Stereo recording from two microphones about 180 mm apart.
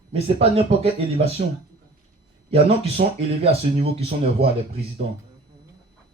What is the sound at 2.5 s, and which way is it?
Speech, 35° right (ahead or behind).